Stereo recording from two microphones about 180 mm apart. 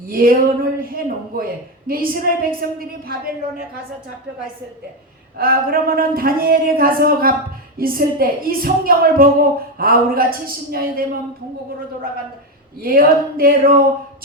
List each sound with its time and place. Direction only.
0.1 s speech: 55° right (ahead or behind)
5.4 s speech: 55° right (ahead or behind)
12.8 s speech: 55° right (ahead or behind)